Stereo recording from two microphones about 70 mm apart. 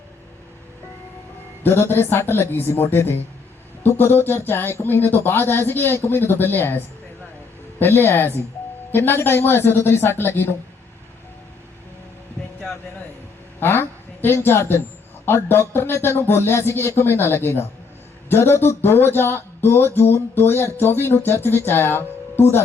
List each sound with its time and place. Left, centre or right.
1.6 s speech: left
13.6 s a woman's voice: left